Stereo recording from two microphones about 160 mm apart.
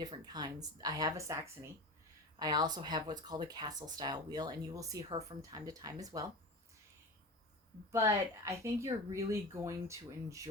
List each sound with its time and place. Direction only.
0.0 s speech: 25° right (ahead or behind)
7.9 s speech: 20° right (ahead or behind)